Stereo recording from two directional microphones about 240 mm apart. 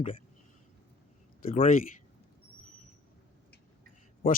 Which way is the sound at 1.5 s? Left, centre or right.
Left.